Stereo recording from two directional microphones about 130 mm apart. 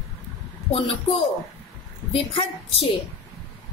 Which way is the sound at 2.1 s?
45° left (ahead or behind).